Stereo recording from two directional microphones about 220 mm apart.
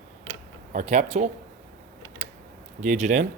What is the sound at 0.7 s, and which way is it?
Speech, 30° right (ahead or behind).